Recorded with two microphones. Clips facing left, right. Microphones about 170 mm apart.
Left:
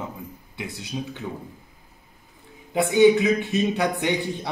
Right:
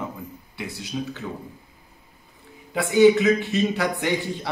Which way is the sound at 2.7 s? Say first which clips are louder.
Even; 20° left (ahead or behind).